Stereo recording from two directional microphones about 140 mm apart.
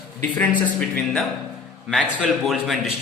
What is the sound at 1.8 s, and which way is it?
Speech, centre (ahead or behind).